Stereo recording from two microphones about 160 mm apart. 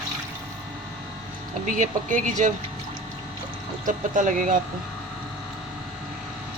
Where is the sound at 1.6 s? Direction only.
50° right (ahead or behind).